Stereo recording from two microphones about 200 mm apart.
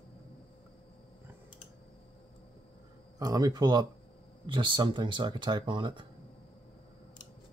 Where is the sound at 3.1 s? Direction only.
20° right (ahead or behind).